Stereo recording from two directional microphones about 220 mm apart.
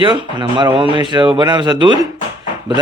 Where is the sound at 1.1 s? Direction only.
20° right (ahead or behind).